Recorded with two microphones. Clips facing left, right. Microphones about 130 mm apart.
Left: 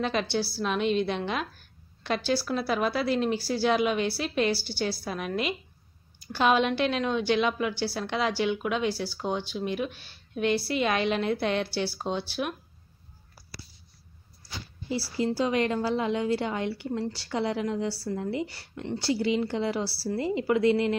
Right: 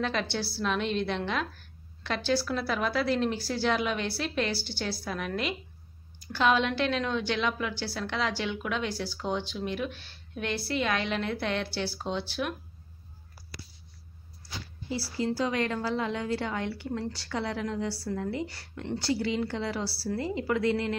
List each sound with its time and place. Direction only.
0.0 s a woman's voice: 15° left (ahead or behind)
14.9 s a woman's voice: 10° left (ahead or behind)